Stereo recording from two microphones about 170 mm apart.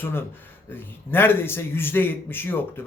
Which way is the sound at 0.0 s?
15° left (ahead or behind).